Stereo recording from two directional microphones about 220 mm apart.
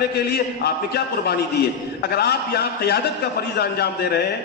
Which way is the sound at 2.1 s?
45° left (ahead or behind).